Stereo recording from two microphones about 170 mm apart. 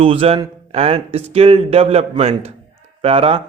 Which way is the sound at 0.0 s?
35° right (ahead or behind).